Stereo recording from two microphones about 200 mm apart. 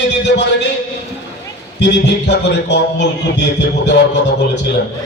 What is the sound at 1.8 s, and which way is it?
A man's voice, 60° left (ahead or behind).